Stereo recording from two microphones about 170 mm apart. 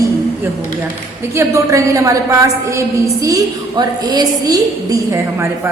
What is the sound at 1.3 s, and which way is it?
A woman's voice, 15° right (ahead or behind).